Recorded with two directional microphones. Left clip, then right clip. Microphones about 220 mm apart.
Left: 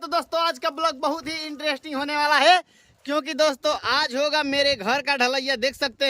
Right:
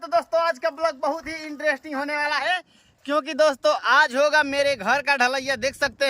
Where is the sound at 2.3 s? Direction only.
35° left (ahead or behind).